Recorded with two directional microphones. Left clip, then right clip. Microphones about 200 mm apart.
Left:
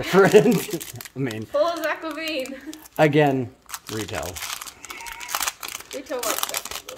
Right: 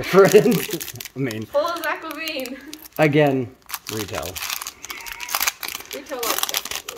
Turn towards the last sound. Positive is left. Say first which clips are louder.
# right 4 dB
turn(degrees=-5)  # may be behind; listen again after turning